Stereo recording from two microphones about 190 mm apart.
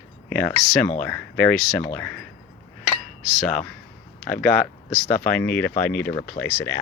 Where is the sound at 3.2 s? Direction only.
Centre (ahead or behind).